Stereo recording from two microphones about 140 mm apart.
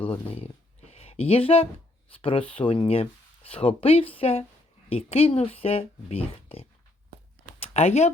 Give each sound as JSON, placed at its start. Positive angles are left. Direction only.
{"t": 0.1, "sound": "speech", "side_deg": 45}